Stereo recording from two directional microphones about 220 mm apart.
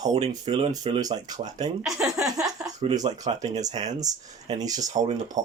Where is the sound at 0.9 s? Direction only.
20° right (ahead or behind).